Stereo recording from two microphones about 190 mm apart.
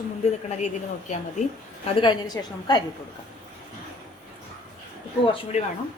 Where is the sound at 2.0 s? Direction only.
25° left (ahead or behind).